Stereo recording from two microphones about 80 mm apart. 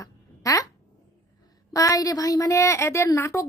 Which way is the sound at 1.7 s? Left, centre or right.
Left.